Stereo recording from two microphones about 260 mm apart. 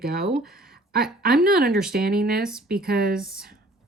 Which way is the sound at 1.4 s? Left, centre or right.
Right.